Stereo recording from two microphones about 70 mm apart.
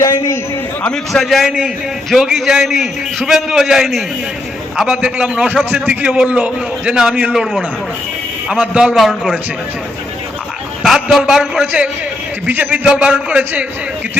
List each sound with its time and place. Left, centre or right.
1.1 s a man's voice: centre
1.5 s a man's voice: centre
2.0 s a man's voice: centre
8.4 s a man's voice: centre
9.0 s a man's voice: centre
10.8 s a man's voice: centre; by 12.8 s right
12.8 s a man's voice: centre